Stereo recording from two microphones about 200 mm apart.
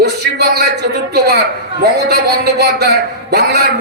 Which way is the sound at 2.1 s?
55° right (ahead or behind).